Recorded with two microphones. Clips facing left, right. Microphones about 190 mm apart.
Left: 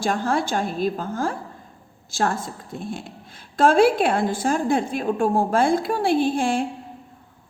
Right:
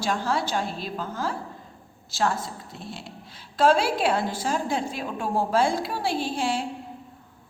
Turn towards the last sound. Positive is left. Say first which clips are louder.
# left 6 dB
turn(degrees=50)  # may be behind; listen again after turning